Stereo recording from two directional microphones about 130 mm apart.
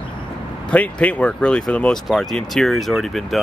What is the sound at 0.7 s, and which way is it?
Speech, 10° left (ahead or behind).